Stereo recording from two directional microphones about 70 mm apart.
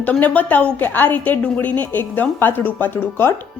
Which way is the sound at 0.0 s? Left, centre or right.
Left.